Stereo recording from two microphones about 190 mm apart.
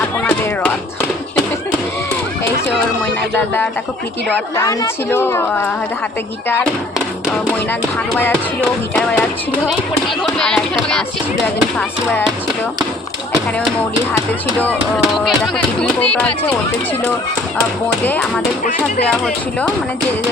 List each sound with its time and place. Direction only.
3.3 s a woman's voice: 10° left (ahead or behind)
7.7 s a woman's voice: 10° left (ahead or behind)
10.2 s speech: 5° left (ahead or behind)
14.6 s speech: 5° left (ahead or behind)
17.8 s a woman's voice: 10° left (ahead or behind)